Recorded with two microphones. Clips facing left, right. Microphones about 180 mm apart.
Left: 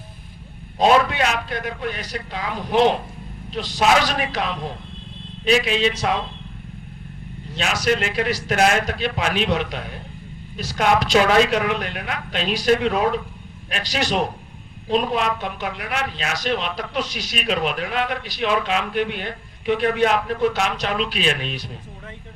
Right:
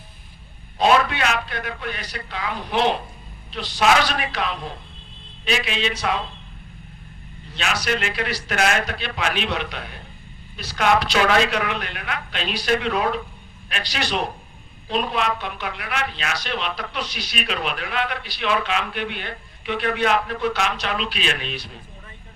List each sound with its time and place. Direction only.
0.8 s a man's voice: 40° left (ahead or behind)
7.5 s a man's voice: 45° left (ahead or behind)